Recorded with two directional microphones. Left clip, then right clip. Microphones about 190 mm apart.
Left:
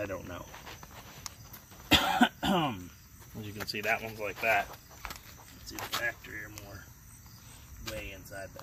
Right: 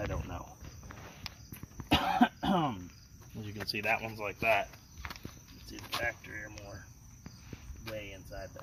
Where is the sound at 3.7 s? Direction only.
30° right (ahead or behind).